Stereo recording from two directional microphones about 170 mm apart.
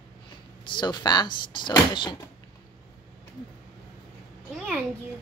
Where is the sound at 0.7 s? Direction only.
25° left (ahead or behind).